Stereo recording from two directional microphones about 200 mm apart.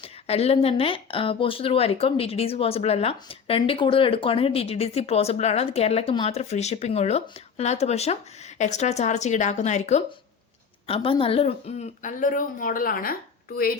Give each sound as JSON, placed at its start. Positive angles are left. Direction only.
{"t": 0.0, "sound": "speech", "side_deg": 30}